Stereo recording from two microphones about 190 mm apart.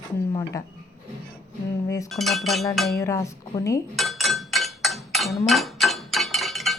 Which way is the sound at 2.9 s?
15° left (ahead or behind).